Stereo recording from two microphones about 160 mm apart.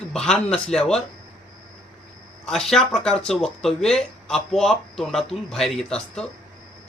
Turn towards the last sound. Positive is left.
turn(degrees=5)  # may be behind; listen again after turning